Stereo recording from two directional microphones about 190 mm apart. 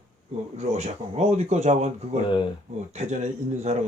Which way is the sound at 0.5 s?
35° right (ahead or behind).